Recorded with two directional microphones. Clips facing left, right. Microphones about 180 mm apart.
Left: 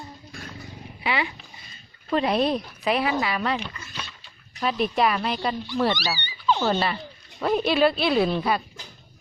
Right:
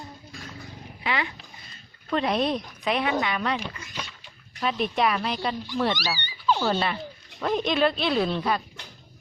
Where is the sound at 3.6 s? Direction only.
15° right (ahead or behind).